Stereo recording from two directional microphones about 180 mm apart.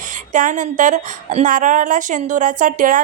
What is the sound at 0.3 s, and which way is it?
A woman's voice, 45° right (ahead or behind).